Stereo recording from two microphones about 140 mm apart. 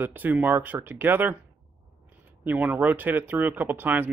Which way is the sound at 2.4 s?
10° right (ahead or behind).